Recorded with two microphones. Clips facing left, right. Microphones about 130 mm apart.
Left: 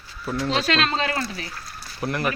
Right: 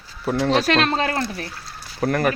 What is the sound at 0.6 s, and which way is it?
Speech, 55° right (ahead or behind).